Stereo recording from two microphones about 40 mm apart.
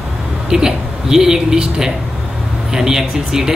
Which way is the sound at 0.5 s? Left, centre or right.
Centre.